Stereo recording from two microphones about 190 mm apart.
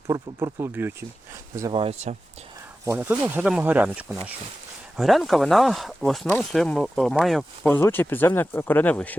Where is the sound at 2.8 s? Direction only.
10° right (ahead or behind).